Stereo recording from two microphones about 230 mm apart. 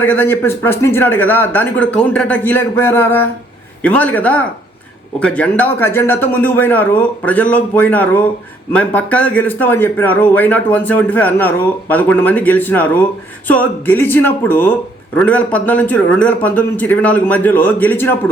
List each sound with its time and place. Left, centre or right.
0.0 s speech: centre